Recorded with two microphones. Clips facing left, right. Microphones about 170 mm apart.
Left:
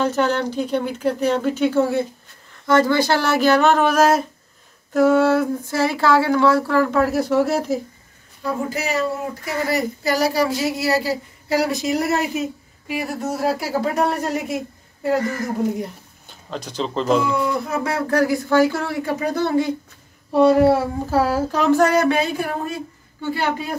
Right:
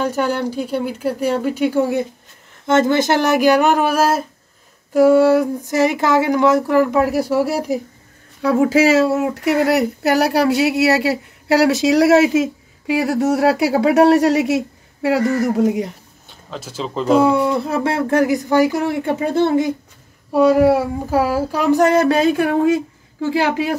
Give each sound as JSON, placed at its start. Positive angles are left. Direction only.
{"t": 0.0, "sound": "a sound", "side_deg": -10}
{"t": 8.4, "sound": "speech", "side_deg": -85}
{"t": 16.3, "sound": "speech", "side_deg": 0}
{"t": 17.4, "sound": "speech", "side_deg": -30}
{"t": 20.3, "sound": "a sound", "side_deg": -10}
{"t": 22.0, "sound": "speech", "side_deg": -40}
{"t": 22.4, "sound": "speech", "side_deg": -80}
{"t": 23.2, "sound": "a woman's voice", "side_deg": -90}